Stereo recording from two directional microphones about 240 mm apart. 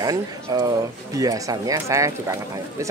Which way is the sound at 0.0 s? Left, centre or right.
Centre.